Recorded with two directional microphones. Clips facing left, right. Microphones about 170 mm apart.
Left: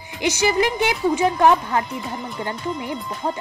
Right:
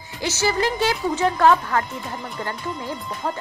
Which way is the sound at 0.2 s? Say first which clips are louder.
Left 3 dB; 15° left (ahead or behind).